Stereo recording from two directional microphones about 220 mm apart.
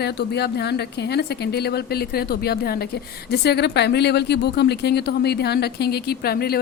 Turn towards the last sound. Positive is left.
turn(degrees=45)  # may be behind; listen again after turning